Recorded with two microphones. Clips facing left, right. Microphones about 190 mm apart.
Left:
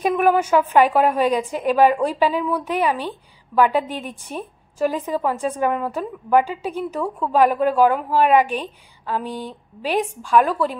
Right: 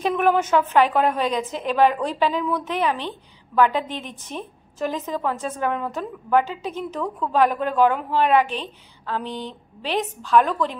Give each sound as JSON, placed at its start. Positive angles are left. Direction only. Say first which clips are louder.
{"t": 0.0, "sound": "a woman's voice", "louder": "left 2 dB", "side_deg": 10}